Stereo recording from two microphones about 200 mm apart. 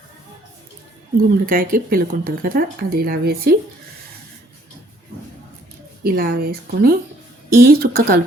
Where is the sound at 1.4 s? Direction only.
45° right (ahead or behind).